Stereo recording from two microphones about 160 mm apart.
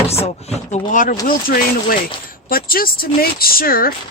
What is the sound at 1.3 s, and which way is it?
Speech, 65° left (ahead or behind).